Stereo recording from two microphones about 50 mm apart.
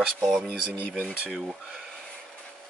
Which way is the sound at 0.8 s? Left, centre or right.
Left.